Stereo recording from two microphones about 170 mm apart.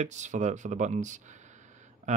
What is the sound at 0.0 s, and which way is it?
Speech, 45° right (ahead or behind).